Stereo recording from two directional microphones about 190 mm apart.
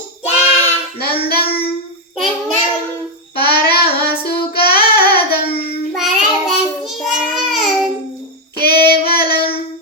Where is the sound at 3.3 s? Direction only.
55° left (ahead or behind).